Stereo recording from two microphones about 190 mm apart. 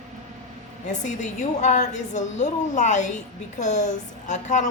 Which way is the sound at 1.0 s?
40° left (ahead or behind).